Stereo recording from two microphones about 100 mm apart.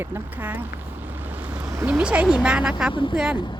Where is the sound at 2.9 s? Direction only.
55° left (ahead or behind).